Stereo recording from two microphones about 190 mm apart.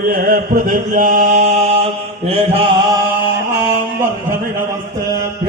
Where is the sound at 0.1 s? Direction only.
50° right (ahead or behind).